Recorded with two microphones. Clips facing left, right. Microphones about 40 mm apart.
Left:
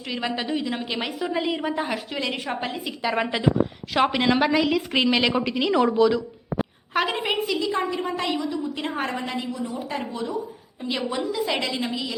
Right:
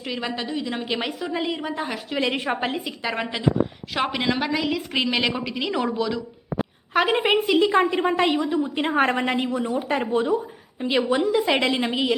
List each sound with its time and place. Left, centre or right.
0.0 s speech: centre
2.1 s a woman's voice: centre
2.7 s speech: centre
7.1 s a woman's voice: right
7.5 s a woman's voice: right
9.0 s a woman's voice: right
9.9 s a woman's voice: right
10.8 s a woman's voice: right